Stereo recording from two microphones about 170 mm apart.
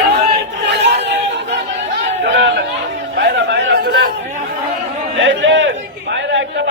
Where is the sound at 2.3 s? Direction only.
75° right (ahead or behind).